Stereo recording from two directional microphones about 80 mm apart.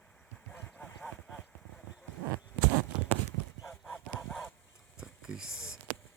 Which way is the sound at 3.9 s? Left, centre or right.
Left.